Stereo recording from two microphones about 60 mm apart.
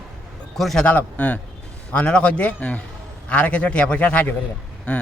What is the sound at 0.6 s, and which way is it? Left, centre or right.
Speech, centre.